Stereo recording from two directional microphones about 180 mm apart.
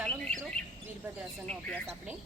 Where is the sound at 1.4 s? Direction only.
5° left (ahead or behind).